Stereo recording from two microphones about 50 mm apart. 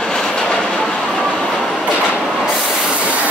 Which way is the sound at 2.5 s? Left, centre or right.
Centre.